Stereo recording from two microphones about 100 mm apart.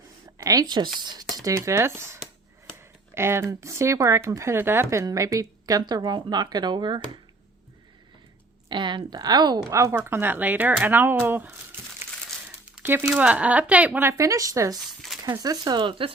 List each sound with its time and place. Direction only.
0.3 s speech: 35° right (ahead or behind)
3.2 s speech: 25° right (ahead or behind); by 7.0 s 50° right (ahead or behind)
8.7 s a woman's voice: 50° right (ahead or behind)
9.6 s speech: 30° right (ahead or behind)
12.8 s speech: 20° right (ahead or behind)
14.1 s speech: 35° right (ahead or behind)
15.8 s speech: 60° right (ahead or behind)